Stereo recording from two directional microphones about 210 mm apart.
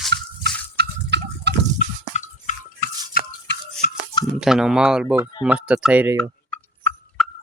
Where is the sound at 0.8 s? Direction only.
55° right (ahead or behind).